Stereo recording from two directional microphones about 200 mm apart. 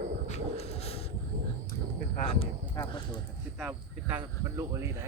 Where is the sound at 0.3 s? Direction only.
30° left (ahead or behind).